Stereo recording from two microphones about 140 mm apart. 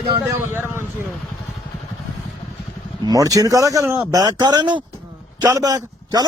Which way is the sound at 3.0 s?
25° right (ahead or behind).